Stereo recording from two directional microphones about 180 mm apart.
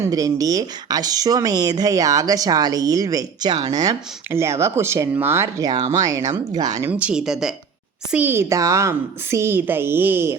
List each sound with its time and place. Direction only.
0.0 s speech: 20° right (ahead or behind)
7.0 s a woman's voice: 5° right (ahead or behind)